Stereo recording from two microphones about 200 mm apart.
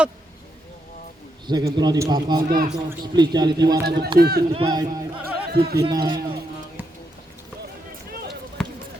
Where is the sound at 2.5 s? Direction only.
45° right (ahead or behind).